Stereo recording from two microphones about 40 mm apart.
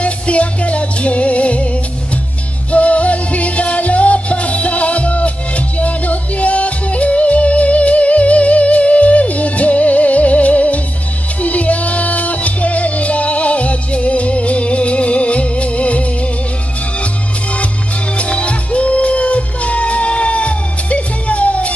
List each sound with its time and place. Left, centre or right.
0.0 s music: left
2.7 s music: left
18.1 s music: left